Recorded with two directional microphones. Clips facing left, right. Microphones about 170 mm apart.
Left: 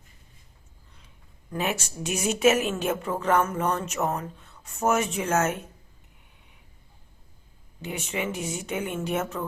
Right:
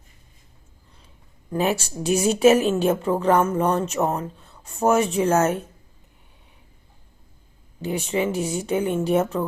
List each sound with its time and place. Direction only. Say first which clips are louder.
1.5 s a woman's voice: right 6 dB; 35° right (ahead or behind)
7.8 s a woman's voice: right 7 dB; 35° right (ahead or behind)